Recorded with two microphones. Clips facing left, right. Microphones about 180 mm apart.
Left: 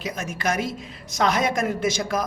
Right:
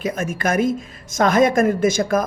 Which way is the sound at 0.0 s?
50° right (ahead or behind).